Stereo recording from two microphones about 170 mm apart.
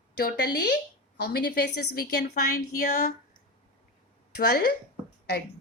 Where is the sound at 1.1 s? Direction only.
75° left (ahead or behind).